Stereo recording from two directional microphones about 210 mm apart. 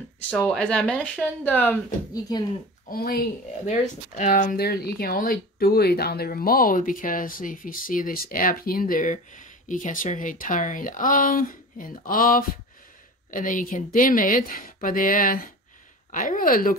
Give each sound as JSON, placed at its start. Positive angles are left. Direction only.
{"t": 0.3, "sound": "speech", "side_deg": 5}
{"t": 2.9, "sound": "speech", "side_deg": 45}